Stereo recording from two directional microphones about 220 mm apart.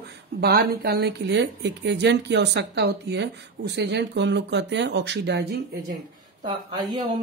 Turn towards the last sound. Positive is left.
turn(degrees=-20)  # may be behind; listen again after turning